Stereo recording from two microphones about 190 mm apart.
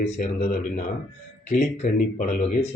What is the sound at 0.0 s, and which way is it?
A man's voice, 40° left (ahead or behind).